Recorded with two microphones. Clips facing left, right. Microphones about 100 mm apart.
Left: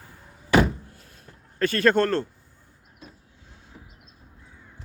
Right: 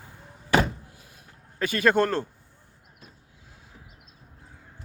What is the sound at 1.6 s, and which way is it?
Speech, 10° right (ahead or behind).